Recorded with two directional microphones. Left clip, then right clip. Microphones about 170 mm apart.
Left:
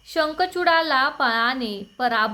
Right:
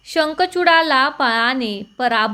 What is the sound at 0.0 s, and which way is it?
A woman's voice, 15° right (ahead or behind).